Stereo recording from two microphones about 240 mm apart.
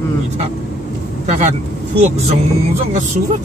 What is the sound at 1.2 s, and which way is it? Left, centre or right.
Speech, right.